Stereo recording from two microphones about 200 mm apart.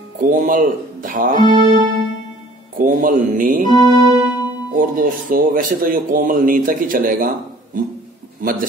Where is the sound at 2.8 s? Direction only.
45° right (ahead or behind).